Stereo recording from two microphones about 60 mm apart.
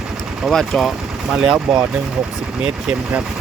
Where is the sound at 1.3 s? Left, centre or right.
Centre.